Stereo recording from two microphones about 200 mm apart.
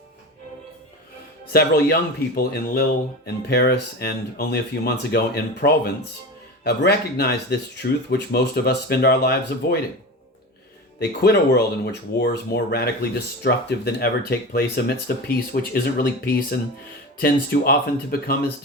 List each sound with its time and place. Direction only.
1.5 s speech: 50° left (ahead or behind)
11.2 s speech: 55° left (ahead or behind)